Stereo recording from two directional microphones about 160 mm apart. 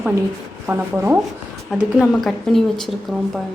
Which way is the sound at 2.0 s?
Centre (ahead or behind).